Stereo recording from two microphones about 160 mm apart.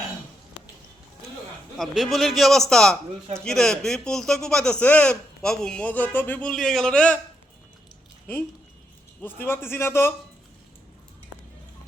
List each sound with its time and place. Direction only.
1.8 s speech: centre (ahead or behind)
9.2 s a man's voice: 15° left (ahead or behind)